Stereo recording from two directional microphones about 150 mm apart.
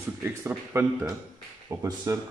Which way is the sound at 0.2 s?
20° right (ahead or behind).